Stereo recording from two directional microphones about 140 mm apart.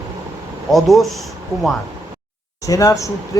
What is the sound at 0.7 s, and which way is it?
Speech, centre (ahead or behind).